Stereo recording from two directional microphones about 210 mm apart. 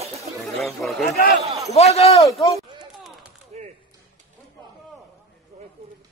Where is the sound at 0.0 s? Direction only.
30° right (ahead or behind).